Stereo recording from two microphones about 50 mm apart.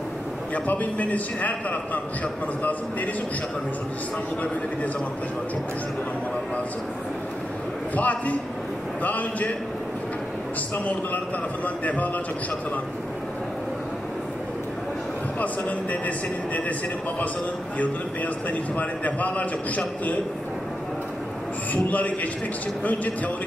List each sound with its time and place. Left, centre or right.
0.7 s a man's voice: left
7.9 s a man's voice: left
11.6 s a man's voice: left
17.7 s a man's voice: left
21.8 s a man's voice: left